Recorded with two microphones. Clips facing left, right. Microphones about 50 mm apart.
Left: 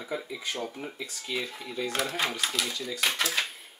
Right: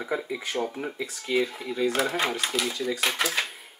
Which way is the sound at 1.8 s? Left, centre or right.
Centre.